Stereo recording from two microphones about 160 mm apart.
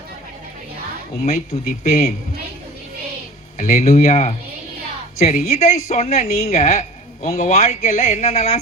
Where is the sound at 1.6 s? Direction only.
45° left (ahead or behind).